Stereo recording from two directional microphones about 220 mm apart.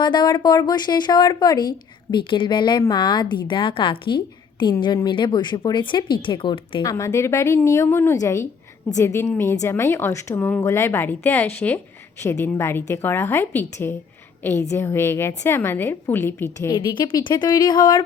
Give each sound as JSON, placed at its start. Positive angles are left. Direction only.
{"t": 0.0, "sound": "a woman's voice", "side_deg": 20}
{"t": 16.7, "sound": "a woman's voice", "side_deg": 20}